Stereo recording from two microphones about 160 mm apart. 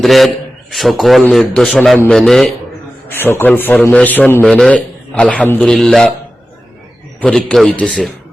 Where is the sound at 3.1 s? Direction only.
15° left (ahead or behind).